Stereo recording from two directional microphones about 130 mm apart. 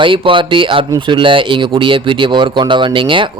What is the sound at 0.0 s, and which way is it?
Speech, 40° right (ahead or behind).